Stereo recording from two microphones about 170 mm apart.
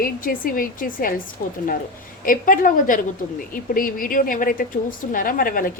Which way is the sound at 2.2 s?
55° left (ahead or behind).